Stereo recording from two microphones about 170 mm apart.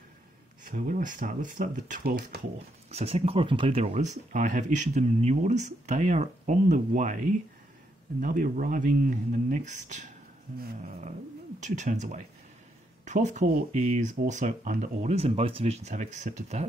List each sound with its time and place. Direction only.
0.7 s speech: 50° right (ahead or behind)
2.9 s speech: 40° right (ahead or behind)
11.6 s speech: 45° right (ahead or behind)